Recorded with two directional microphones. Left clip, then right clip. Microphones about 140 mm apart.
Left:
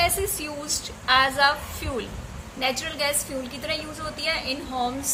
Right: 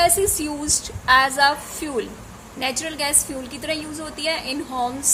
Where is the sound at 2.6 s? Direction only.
80° right.